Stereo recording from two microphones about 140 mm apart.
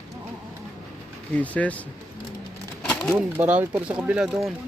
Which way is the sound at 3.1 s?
15° right (ahead or behind).